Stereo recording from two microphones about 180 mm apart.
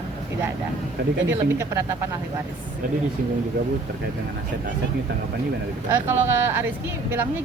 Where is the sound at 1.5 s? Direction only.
15° right (ahead or behind).